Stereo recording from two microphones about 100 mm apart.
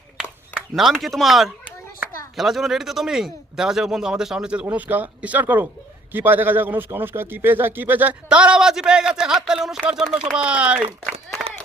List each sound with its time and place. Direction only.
0.8 s a man's voice: centre (ahead or behind)